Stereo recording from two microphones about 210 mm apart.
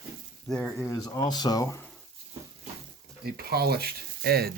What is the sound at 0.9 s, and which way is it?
Speech, 20° left (ahead or behind).